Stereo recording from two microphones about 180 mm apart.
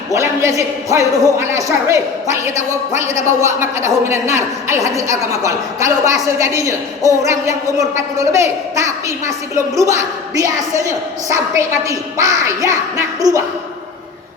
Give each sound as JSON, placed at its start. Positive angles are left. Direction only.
{"t": 0.1, "sound": "a woman's voice", "side_deg": -15}